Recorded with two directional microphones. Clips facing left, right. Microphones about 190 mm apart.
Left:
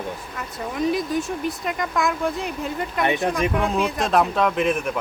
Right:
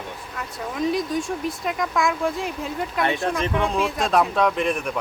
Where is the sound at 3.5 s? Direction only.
5° left (ahead or behind).